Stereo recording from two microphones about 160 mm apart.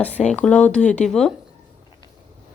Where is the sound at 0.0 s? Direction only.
10° left (ahead or behind).